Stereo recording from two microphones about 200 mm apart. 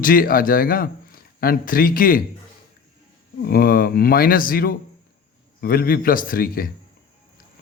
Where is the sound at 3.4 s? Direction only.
50° left (ahead or behind).